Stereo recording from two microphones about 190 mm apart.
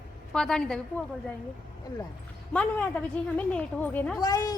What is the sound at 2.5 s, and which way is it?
A woman's voice, 5° left (ahead or behind).